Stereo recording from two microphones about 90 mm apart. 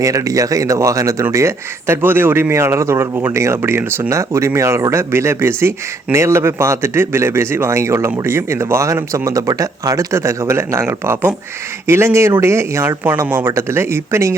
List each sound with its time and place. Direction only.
0.0 s speech: 35° right (ahead or behind)